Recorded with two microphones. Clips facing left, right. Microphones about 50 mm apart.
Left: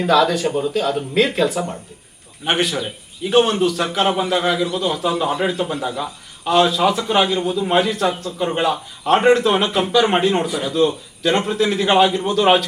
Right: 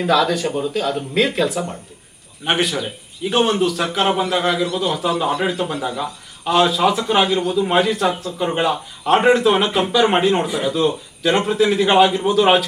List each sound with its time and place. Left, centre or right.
0.0 s a man's voice: centre